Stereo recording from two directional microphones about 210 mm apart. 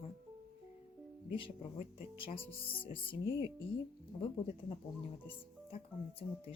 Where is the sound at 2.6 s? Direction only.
25° left (ahead or behind).